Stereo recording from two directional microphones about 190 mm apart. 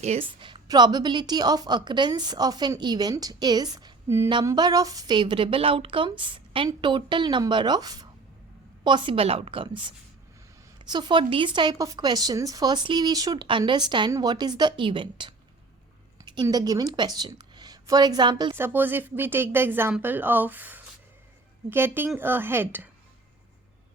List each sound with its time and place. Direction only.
0.0 s a woman's voice: 30° right (ahead or behind)
18.5 s speech: 10° right (ahead or behind)